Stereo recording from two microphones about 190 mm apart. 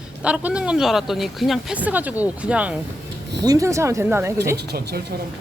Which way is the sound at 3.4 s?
20° right (ahead or behind).